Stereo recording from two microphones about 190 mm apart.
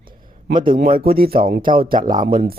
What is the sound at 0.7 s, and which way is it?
Speech, 50° right (ahead or behind).